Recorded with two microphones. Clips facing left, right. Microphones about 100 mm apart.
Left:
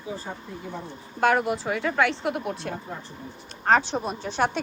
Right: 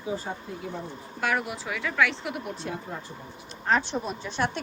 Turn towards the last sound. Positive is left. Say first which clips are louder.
# left 4 dB
turn(degrees=90)